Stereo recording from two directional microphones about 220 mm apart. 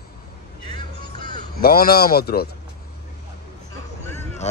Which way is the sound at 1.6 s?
45° left (ahead or behind).